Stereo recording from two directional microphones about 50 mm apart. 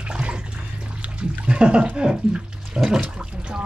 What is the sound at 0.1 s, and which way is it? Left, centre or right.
Bathtub, right.